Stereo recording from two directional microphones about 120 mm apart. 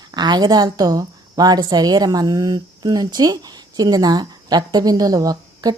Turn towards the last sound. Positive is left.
turn(degrees=-30)  # may be behind; listen again after turning